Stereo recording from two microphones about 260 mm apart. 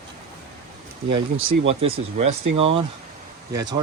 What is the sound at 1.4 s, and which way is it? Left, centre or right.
Speech, right.